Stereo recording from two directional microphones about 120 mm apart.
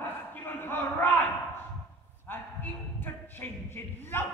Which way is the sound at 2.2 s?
15° left (ahead or behind).